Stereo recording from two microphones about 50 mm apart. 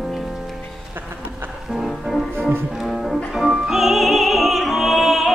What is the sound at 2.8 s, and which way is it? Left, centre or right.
Music, centre.